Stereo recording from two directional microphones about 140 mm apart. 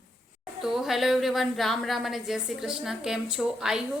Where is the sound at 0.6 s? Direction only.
Centre (ahead or behind).